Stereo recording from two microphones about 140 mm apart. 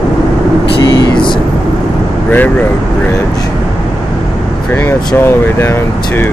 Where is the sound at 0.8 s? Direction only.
30° left (ahead or behind).